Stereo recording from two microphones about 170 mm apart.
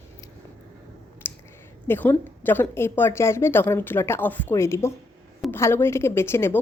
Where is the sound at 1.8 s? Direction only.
10° left (ahead or behind).